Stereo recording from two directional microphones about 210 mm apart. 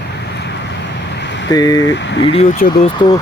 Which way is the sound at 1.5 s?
20° left (ahead or behind).